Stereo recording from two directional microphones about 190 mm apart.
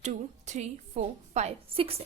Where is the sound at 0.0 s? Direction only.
40° right (ahead or behind).